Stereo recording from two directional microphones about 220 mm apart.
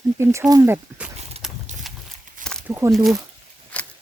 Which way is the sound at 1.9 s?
Centre (ahead or behind).